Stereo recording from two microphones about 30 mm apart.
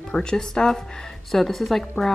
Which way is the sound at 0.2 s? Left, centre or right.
Left.